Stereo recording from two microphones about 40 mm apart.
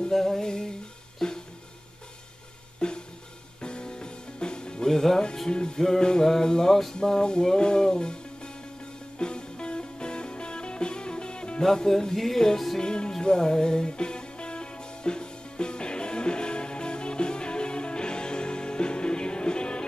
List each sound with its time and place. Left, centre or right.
0.1 s music: centre
2.8 s music: left
5.5 s music: left; by 7.0 s centre
7.0 s music: centre
11.6 s music: centre
12.8 s music: left